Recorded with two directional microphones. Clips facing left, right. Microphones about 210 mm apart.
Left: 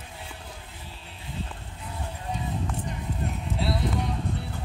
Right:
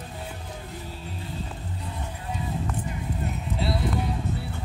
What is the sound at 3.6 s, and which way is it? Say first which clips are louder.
Music: right 1 dB; centre (ahead or behind).